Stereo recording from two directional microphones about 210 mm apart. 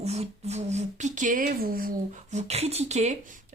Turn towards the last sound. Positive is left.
turn(degrees=-35)  # may be behind; listen again after turning